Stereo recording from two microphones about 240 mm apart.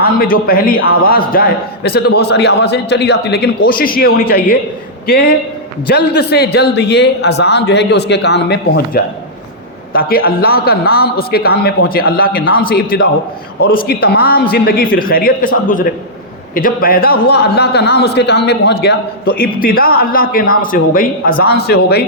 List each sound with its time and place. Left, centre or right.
0.0 s a man's voice: left